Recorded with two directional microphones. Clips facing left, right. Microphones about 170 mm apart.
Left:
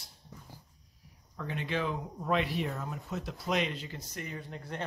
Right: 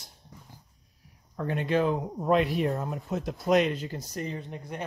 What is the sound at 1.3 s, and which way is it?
Speech, 50° right (ahead or behind).